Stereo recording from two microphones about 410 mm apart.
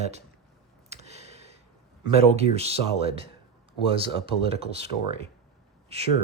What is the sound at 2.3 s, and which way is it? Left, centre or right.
Speech, centre.